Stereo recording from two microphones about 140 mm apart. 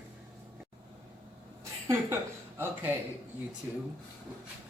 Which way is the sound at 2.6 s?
15° right (ahead or behind).